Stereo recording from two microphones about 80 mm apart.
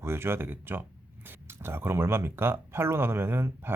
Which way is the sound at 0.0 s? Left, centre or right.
Right.